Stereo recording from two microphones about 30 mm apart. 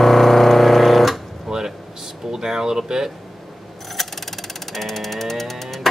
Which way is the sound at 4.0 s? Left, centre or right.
Centre.